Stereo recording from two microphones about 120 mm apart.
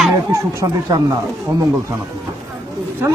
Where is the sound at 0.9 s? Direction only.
35° right (ahead or behind).